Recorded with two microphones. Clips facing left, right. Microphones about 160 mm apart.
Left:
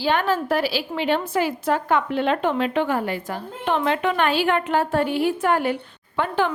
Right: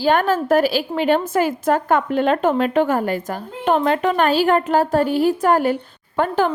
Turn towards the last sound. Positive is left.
turn(degrees=-45)  # may be behind; listen again after turning